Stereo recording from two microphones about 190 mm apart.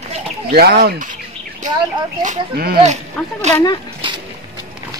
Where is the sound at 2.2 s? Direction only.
45° right (ahead or behind).